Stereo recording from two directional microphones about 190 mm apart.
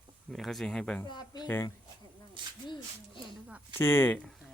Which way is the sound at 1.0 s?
20° left (ahead or behind).